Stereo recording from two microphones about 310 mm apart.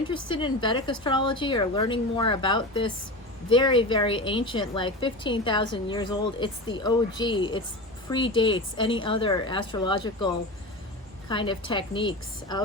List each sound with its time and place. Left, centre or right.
0.1 s a woman's voice: centre